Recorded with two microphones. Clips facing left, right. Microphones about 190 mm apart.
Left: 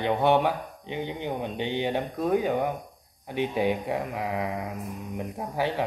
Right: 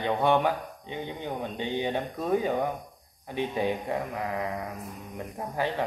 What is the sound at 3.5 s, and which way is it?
Speech, 10° left (ahead or behind).